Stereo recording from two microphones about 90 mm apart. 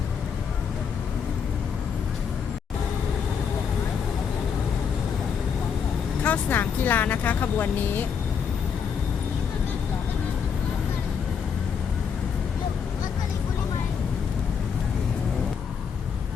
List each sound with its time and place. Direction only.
6.2 s speech: 20° left (ahead or behind)